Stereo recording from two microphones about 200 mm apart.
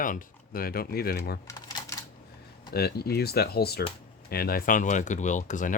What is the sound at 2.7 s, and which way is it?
Speech, 50° left (ahead or behind).